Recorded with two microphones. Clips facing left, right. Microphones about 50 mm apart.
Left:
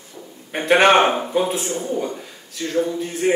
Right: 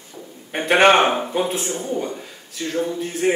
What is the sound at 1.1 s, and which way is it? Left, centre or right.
Speech, centre.